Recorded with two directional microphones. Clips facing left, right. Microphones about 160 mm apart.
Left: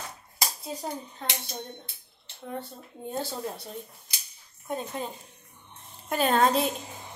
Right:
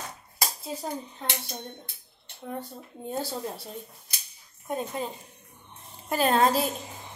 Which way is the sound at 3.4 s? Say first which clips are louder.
Even; 5° right (ahead or behind).